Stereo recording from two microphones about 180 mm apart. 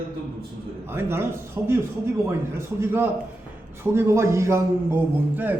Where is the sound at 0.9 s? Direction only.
15° right (ahead or behind).